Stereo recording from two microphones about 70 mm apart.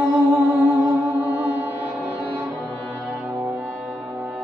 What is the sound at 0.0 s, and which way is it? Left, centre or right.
Music, centre.